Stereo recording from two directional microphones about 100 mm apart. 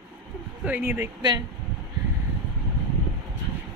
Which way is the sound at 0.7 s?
20° right (ahead or behind).